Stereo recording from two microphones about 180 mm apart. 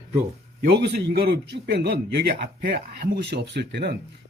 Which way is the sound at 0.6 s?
70° right (ahead or behind).